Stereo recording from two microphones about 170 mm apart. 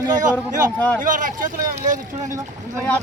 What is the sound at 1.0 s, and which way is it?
Speech, 50° right (ahead or behind).